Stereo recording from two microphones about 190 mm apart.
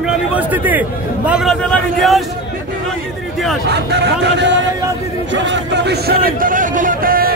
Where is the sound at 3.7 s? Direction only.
60° right (ahead or behind).